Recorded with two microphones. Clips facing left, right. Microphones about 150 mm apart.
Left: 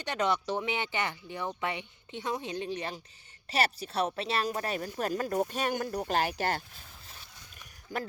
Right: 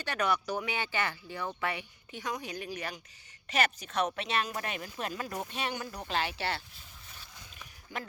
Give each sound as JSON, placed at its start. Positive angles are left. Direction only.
{"t": 0.0, "sound": "speech", "side_deg": 20}
{"t": 7.9, "sound": "speech", "side_deg": 40}